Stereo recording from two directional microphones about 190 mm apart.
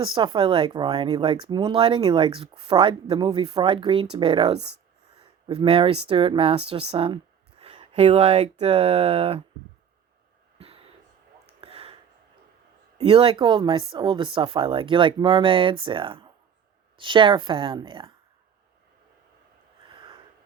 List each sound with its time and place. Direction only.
0.0 s speech: 25° right (ahead or behind)
10.6 s a sound: 30° right (ahead or behind)
13.0 s speech: 30° right (ahead or behind)